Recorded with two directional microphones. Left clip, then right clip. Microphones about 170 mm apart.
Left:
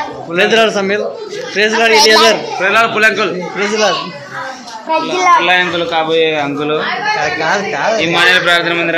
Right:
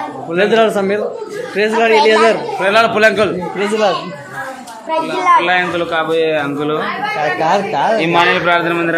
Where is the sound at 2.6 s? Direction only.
90° right.